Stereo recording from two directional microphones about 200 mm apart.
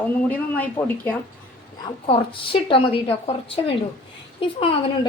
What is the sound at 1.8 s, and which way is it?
A woman's voice, 25° left (ahead or behind).